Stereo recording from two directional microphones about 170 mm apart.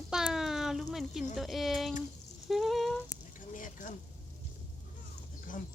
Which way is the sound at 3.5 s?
50° left (ahead or behind).